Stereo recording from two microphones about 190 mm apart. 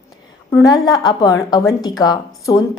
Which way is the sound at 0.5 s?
20° left (ahead or behind).